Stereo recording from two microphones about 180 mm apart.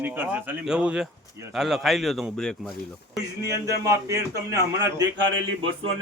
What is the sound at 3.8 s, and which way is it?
A man's voice, 20° right (ahead or behind).